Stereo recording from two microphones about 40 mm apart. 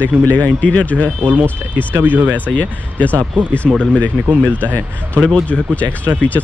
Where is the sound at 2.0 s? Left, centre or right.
Right.